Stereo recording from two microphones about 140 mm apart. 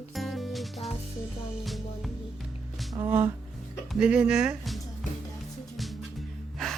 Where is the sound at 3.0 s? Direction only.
20° right (ahead or behind).